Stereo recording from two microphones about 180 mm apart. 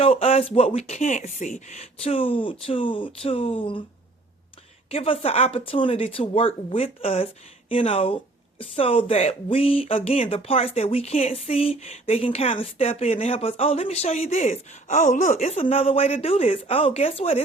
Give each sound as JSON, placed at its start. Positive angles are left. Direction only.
{"t": 0.0, "sound": "speech", "side_deg": 35}
{"t": 4.9, "sound": "speech", "side_deg": 30}